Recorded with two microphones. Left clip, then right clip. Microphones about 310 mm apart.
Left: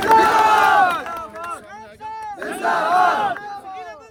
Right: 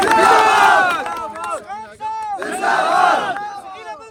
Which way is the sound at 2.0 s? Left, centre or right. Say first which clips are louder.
Right 6 dB; left.